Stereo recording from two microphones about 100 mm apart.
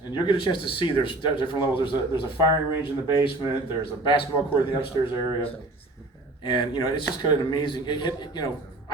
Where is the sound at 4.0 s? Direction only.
50° left (ahead or behind).